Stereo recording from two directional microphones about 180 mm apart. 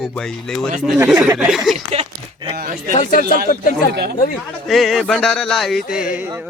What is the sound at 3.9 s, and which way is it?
Speech, 65° right (ahead or behind).